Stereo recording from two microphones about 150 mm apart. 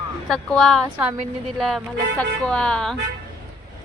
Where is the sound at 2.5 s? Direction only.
5° left (ahead or behind).